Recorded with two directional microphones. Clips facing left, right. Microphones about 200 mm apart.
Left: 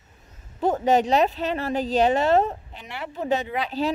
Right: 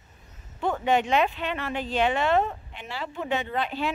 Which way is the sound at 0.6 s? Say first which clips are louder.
Left 4 dB; 40° left (ahead or behind).